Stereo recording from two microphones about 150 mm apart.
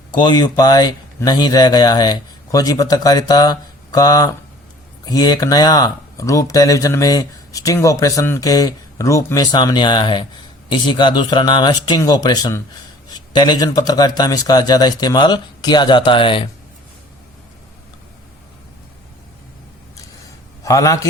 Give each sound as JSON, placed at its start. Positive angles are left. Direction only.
{"t": 0.1, "sound": "speech", "side_deg": 30}
{"t": 20.7, "sound": "speech", "side_deg": 20}